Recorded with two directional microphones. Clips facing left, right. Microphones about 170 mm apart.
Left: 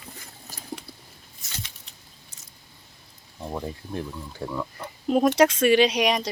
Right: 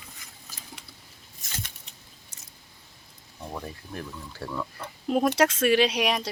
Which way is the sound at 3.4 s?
20° left (ahead or behind).